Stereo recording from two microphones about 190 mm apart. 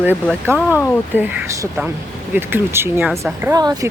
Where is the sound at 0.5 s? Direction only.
15° right (ahead or behind).